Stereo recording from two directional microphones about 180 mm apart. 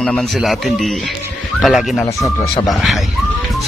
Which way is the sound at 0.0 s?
5° left (ahead or behind).